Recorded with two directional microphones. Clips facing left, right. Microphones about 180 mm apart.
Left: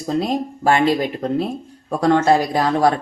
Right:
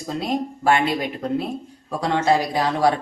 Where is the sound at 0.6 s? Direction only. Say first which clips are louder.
Left 4 dB; 40° left (ahead or behind).